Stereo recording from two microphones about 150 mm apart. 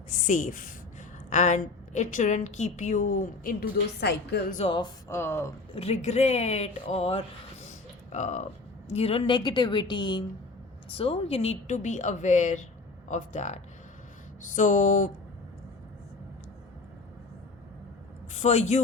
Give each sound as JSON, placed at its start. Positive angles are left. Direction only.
{"t": 0.1, "sound": "a woman's voice", "side_deg": 60}
{"t": 4.6, "sound": "a woman's voice", "side_deg": 45}
{"t": 5.0, "sound": "speech", "side_deg": 15}
{"t": 5.7, "sound": "speech", "side_deg": 40}
{"t": 8.9, "sound": "a woman's voice", "side_deg": 40}
{"t": 18.3, "sound": "a man's voice", "side_deg": 45}